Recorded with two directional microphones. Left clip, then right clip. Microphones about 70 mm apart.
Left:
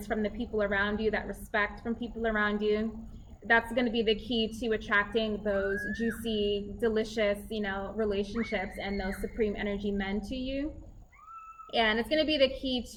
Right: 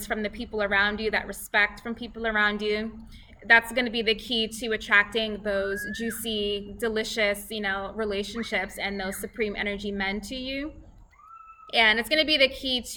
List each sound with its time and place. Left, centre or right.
0.0 s a woman's voice: right
11.7 s a woman's voice: right